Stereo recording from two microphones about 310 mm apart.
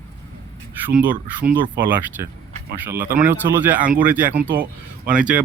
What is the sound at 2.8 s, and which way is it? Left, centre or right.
Speech, centre.